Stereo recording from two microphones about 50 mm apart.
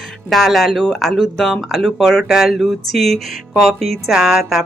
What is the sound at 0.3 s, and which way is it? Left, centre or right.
Speech, centre.